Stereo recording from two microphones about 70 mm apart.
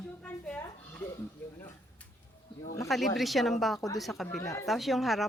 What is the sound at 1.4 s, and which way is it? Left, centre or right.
Speech, left.